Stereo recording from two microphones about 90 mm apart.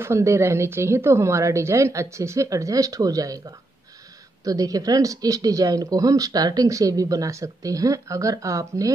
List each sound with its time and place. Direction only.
0.0 s speech: 30° right (ahead or behind)